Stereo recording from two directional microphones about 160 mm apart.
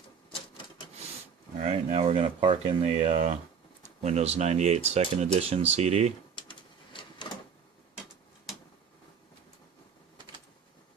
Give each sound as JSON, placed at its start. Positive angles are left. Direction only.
{"t": 1.6, "sound": "speech", "side_deg": -40}
{"t": 6.3, "sound": "printer", "side_deg": 30}